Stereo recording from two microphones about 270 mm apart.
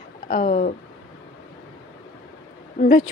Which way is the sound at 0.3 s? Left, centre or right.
Left.